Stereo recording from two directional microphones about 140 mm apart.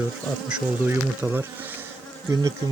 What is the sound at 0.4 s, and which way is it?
Bee, 15° right (ahead or behind).